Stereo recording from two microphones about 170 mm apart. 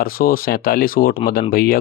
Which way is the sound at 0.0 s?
55° left (ahead or behind).